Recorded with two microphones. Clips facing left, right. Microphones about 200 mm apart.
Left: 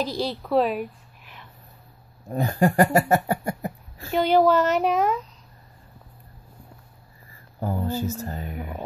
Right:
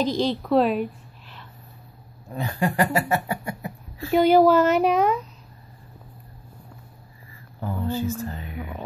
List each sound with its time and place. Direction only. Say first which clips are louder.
0.0 s a woman's voice: right 4 dB; 5° left (ahead or behind)
2.3 s speech: left 4 dB; 45° left (ahead or behind)
4.1 s a woman's voice: right 3 dB; 10° right (ahead or behind)
7.6 s speech: even; 40° left (ahead or behind)